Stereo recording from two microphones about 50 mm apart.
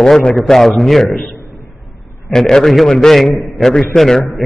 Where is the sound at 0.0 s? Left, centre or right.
Centre.